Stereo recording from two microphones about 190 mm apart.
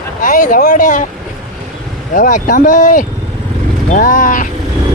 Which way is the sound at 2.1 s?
45° left (ahead or behind).